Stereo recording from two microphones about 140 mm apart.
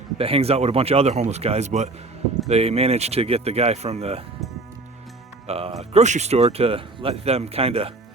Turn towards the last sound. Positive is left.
turn(degrees=-45)  # may be behind; listen again after turning